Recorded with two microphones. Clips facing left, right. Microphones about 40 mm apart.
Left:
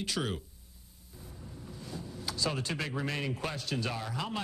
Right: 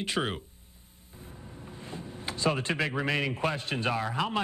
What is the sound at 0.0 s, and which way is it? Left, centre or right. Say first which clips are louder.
Speech: right 4 dB; right.